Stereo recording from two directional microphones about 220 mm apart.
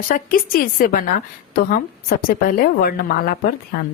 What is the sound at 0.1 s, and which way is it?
A woman's voice, 40° left (ahead or behind).